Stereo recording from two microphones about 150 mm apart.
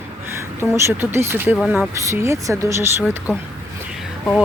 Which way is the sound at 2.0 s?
20° right (ahead or behind).